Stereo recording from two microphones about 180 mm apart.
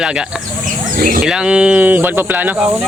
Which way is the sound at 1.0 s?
55° right (ahead or behind).